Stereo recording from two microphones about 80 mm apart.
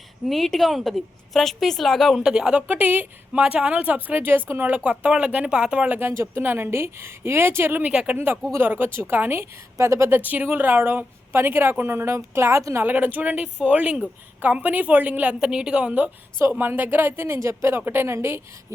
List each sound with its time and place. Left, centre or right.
0.3 s a woman's voice: centre
6.0 s a woman's voice: right
7.9 s a woman's voice: centre
9.7 s a woman's voice: right
10.2 s a woman's voice: right
12.8 s a woman's voice: right
16.4 s a woman's voice: right